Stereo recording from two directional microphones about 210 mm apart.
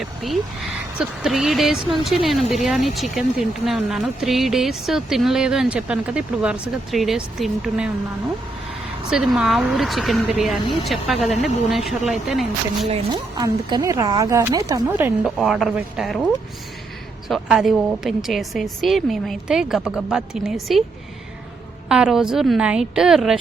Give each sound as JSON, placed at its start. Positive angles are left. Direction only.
{"t": 0.0, "sound": "speech", "side_deg": 0}
{"t": 9.0, "sound": "speech", "side_deg": -5}
{"t": 13.3, "sound": "speech", "side_deg": -20}
{"t": 21.8, "sound": "speech", "side_deg": -5}